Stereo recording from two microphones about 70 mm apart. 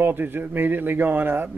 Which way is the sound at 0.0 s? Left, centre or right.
Right.